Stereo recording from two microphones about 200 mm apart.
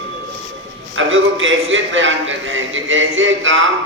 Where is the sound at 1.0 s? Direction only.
75° right (ahead or behind).